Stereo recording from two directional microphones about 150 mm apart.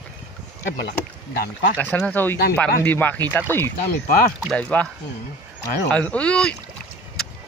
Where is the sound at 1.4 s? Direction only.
90° left.